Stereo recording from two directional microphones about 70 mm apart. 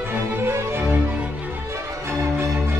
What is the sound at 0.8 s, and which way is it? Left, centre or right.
Music, right.